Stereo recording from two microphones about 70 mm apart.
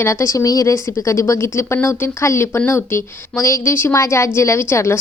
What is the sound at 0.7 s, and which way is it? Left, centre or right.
A woman's voice, left.